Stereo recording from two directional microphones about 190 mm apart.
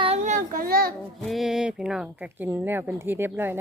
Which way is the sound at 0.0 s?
35° right (ahead or behind).